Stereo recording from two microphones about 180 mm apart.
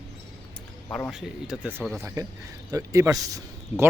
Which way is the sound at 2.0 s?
15° right (ahead or behind).